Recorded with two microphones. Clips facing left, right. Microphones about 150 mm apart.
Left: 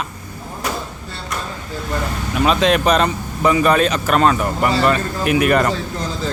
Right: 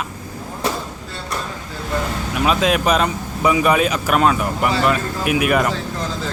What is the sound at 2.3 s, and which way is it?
Speech, 5° right (ahead or behind).